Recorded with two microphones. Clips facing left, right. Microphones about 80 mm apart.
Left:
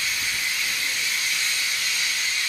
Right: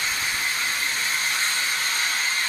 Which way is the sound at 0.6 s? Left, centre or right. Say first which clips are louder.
Right 2 dB; right.